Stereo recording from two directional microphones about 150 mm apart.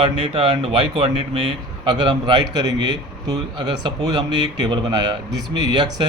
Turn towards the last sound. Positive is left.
turn(degrees=-30)  # may be behind; listen again after turning